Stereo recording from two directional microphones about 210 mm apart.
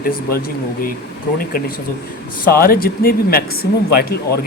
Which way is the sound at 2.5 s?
45° left (ahead or behind).